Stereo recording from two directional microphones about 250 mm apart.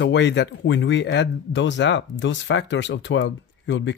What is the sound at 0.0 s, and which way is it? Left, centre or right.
Speech, left.